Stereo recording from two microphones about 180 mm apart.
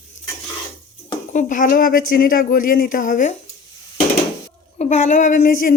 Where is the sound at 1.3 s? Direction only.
45° left (ahead or behind).